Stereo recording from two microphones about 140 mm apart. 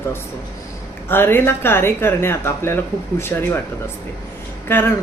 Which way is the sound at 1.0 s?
15° left (ahead or behind).